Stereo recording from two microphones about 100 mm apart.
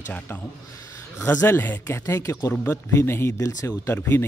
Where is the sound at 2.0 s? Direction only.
30° left (ahead or behind).